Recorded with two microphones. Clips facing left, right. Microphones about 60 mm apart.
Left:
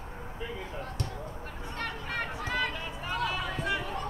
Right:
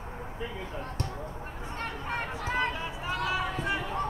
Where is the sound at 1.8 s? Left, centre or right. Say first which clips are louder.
Even; right.